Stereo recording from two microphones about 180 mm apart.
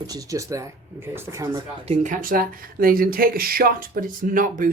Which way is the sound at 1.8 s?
40° right (ahead or behind).